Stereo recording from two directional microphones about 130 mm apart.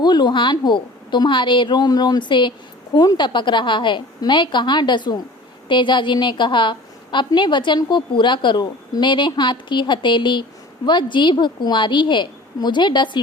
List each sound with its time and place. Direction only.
0.0 s a woman's voice: 35° left (ahead or behind)